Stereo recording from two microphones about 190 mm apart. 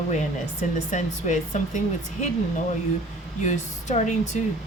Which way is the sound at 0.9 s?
40° left (ahead or behind).